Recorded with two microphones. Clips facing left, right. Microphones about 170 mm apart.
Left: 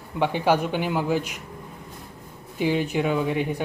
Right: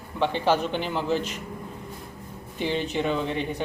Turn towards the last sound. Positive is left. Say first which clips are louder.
# left 3 dB
turn(degrees=10)  # may be behind; listen again after turning